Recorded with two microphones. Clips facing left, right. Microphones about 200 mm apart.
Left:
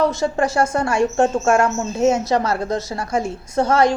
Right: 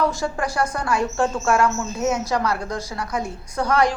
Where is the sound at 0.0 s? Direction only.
25° left (ahead or behind).